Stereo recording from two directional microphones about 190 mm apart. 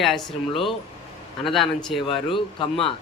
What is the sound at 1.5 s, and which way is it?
Speech, centre (ahead or behind).